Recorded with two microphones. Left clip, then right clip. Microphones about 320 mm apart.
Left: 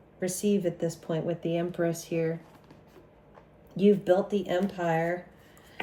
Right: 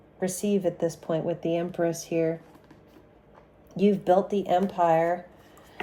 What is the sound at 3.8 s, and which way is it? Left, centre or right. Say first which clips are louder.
Speech: right 1 dB; centre.